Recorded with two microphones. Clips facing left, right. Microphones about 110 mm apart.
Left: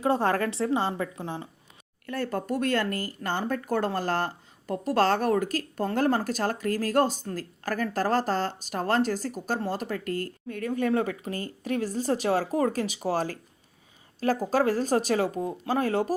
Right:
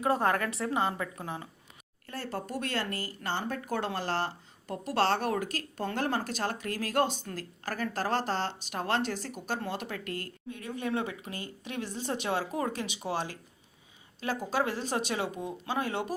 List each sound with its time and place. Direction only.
0.0 s a woman's voice: 30° left (ahead or behind)
2.0 s speech: 50° left (ahead or behind)